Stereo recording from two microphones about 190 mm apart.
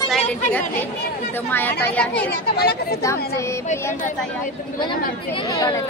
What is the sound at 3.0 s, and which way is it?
Speech, 15° left (ahead or behind).